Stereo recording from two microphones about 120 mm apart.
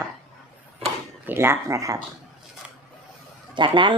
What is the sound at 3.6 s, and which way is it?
Speech, 40° right (ahead or behind).